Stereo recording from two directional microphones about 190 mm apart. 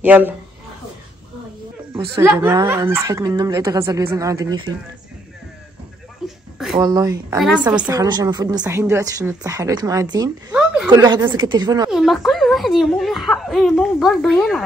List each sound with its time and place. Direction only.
0.0 s speech: 10° right (ahead or behind)
2.1 s speech: 10° right (ahead or behind)
6.2 s a sound: 5° right (ahead or behind)
6.8 s speech: 20° right (ahead or behind)
7.3 s speech: 5° right (ahead or behind)
7.9 s speech: 20° right (ahead or behind)
10.5 s a sound: 5° right (ahead or behind)
11.4 s speech: 20° right (ahead or behind)
11.9 s speech: centre (ahead or behind)